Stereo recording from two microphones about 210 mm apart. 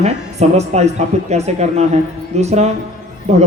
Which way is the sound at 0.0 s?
30° right (ahead or behind).